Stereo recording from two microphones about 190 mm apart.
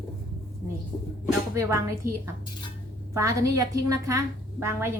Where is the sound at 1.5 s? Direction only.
15° right (ahead or behind).